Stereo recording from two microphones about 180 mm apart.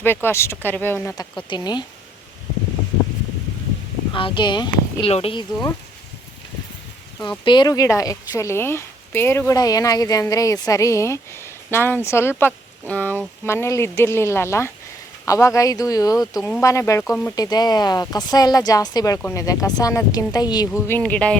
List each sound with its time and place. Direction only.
0.0 s speech: 10° left (ahead or behind)
4.1 s speech: 25° left (ahead or behind)
7.2 s speech: 25° left (ahead or behind); by 21.3 s 5° left (ahead or behind)